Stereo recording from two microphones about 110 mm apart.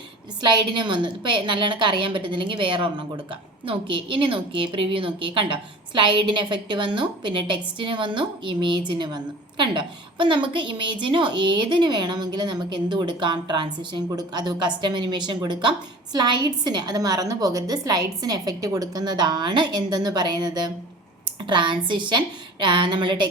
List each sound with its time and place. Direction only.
0.4 s a woman's voice: 45° right (ahead or behind)